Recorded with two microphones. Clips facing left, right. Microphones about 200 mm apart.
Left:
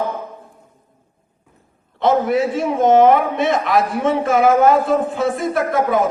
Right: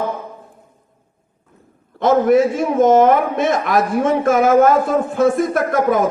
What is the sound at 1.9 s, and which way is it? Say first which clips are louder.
A man's voice: right 3 dB; 45° right (ahead or behind).